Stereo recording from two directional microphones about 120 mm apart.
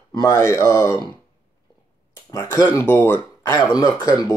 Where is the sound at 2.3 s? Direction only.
25° left (ahead or behind).